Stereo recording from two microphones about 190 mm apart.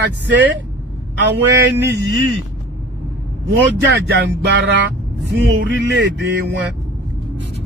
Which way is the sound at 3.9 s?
65° right (ahead or behind).